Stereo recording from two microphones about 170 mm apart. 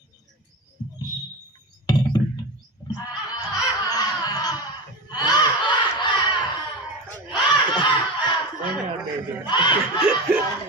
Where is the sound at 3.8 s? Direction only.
20° left (ahead or behind).